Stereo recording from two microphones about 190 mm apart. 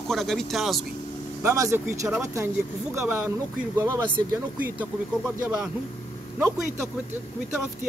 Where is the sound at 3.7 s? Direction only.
15° right (ahead or behind).